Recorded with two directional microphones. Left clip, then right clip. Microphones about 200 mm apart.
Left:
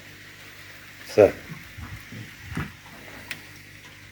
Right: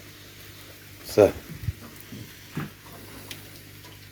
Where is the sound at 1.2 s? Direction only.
10° right (ahead or behind).